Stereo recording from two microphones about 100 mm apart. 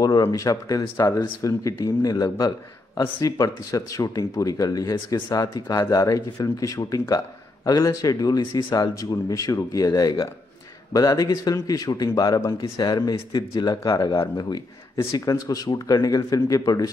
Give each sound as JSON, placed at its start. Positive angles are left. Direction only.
{"t": 0.0, "sound": "speech", "side_deg": 40}
{"t": 14.2, "sound": "speech", "side_deg": 50}
{"t": 15.1, "sound": "speech", "side_deg": 40}